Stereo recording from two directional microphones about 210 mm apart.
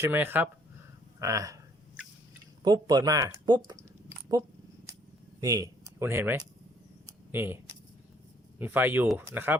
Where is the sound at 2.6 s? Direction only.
20° right (ahead or behind).